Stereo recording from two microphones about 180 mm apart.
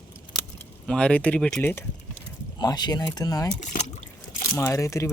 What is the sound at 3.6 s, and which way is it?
Speech, 40° left (ahead or behind).